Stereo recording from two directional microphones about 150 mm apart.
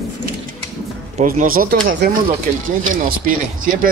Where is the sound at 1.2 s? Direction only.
65° right (ahead or behind).